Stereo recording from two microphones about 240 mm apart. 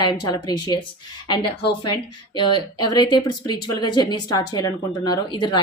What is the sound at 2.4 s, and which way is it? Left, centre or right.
A woman's voice, centre.